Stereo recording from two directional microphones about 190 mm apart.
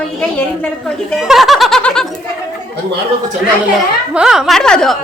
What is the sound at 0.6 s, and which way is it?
Speech, 5° left (ahead or behind).